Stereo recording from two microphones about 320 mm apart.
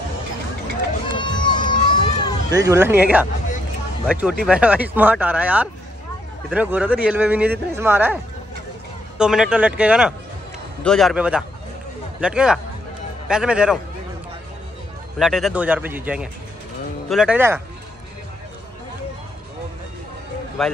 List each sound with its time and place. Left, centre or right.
1.0 s run: centre
2.5 s speech: centre
9.2 s speech: centre
15.1 s speech: centre
20.6 s speech: centre